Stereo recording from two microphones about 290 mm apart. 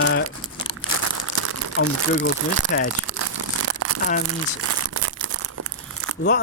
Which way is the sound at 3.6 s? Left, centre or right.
Right.